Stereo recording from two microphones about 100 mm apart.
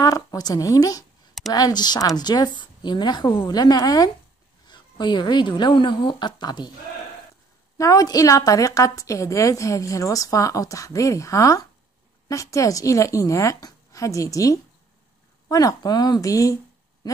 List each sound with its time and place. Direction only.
0.0 s a woman's voice: 40° left (ahead or behind)
7.7 s a woman's voice: 35° left (ahead or behind)